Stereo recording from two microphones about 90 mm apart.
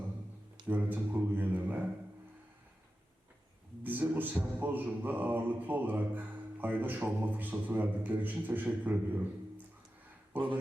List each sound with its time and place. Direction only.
0.7 s speech: 20° right (ahead or behind)
3.8 s mantra: 20° right (ahead or behind)
10.3 s speech: 20° right (ahead or behind)